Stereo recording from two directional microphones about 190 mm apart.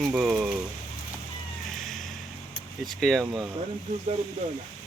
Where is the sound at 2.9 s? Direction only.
Centre (ahead or behind).